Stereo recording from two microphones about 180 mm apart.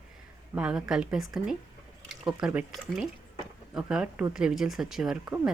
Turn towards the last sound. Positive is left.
turn(degrees=-5)  # may be behind; listen again after turning